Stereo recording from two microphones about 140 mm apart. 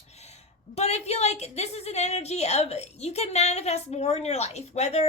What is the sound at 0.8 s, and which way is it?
A woman's voice, 50° left (ahead or behind).